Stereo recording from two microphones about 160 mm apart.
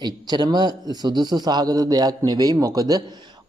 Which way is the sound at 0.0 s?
25° right (ahead or behind).